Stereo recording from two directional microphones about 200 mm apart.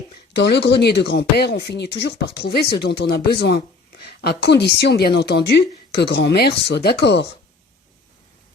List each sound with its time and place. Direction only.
0.3 s a woman's voice: 55° left (ahead or behind)